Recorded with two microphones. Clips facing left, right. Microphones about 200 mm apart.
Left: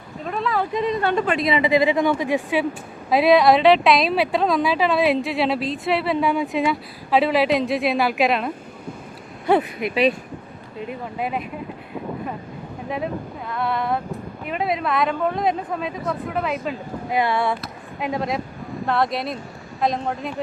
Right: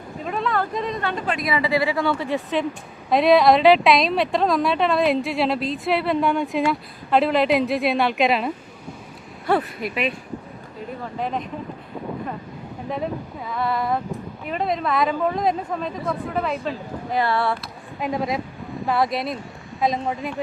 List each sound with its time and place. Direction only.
0.2 s speech: centre (ahead or behind)
1.0 s a woman's voice: 25° left (ahead or behind)
3.1 s speech: centre (ahead or behind)
9.9 s speech: 35° left (ahead or behind)
11.2 s a woman's voice: 10° left (ahead or behind)
13.5 s speech: centre (ahead or behind)
17.2 s a woman's voice: 15° left (ahead or behind)
17.5 s speech: centre (ahead or behind)